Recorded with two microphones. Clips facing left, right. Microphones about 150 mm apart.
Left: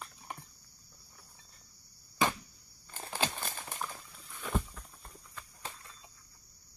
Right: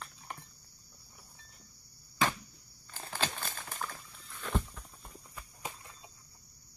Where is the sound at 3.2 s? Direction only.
10° left (ahead or behind).